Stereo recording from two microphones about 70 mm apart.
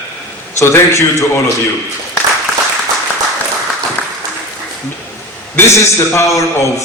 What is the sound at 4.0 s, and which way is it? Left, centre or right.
Applause, left.